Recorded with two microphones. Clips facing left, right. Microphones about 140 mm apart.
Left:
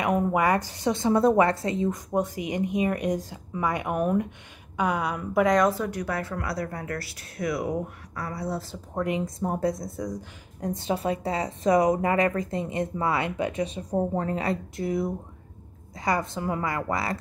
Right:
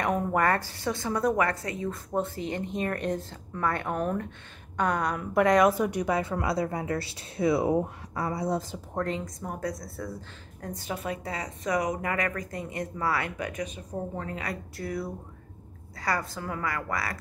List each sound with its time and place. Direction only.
0.0 s a woman's voice: 10° left (ahead or behind)
5.7 s speech: 15° right (ahead or behind)
8.9 s a woman's voice: 15° left (ahead or behind)
9.2 s a woman's voice: 30° left (ahead or behind)